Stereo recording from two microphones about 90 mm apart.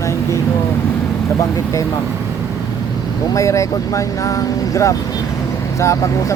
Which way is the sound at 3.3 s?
35° left (ahead or behind).